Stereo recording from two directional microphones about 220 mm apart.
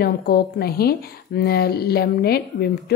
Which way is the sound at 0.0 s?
45° left (ahead or behind).